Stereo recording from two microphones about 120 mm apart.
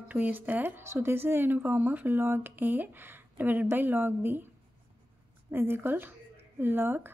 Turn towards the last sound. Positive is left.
turn(degrees=-20)  # may be behind; listen again after turning